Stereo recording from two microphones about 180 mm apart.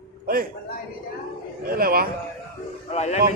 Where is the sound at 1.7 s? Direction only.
55° right (ahead or behind).